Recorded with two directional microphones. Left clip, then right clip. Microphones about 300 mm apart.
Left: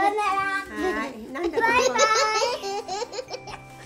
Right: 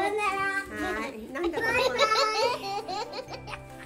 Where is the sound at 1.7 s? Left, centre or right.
Left.